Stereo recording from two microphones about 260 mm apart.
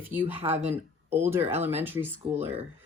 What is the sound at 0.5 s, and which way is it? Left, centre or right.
Speech, right.